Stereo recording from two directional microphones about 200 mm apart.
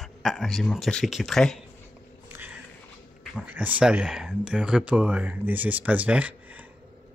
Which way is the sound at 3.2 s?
5° left (ahead or behind).